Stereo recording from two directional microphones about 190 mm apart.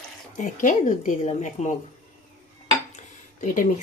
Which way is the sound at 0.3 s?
40° left (ahead or behind).